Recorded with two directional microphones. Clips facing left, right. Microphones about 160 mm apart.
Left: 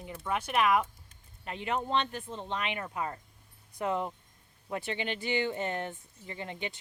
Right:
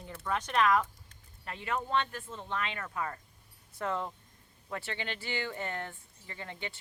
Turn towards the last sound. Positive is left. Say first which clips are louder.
# left 4 dB
turn(degrees=20)  # may be behind; listen again after turning